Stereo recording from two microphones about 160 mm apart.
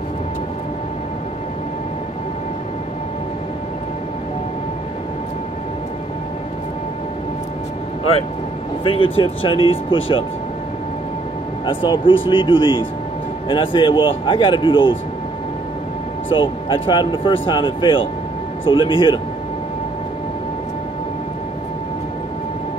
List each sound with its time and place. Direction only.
8.8 s speech: 35° left (ahead or behind)
11.6 s speech: 30° left (ahead or behind)
16.3 s speech: 30° left (ahead or behind)